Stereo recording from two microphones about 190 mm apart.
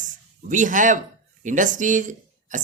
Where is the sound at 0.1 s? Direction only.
40° right (ahead or behind).